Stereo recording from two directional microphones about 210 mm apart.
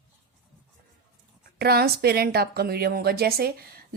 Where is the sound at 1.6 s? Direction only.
50° right (ahead or behind).